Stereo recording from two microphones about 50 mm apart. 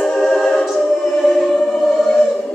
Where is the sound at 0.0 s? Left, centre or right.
Centre.